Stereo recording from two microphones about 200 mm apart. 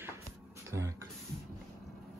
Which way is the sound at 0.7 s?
15° right (ahead or behind).